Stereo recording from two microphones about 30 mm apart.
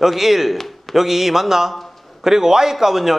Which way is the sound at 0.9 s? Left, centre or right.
Centre.